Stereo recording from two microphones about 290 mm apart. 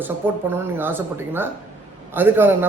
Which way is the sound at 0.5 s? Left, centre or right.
Centre.